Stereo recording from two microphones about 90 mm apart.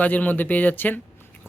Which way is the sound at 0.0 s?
20° left (ahead or behind).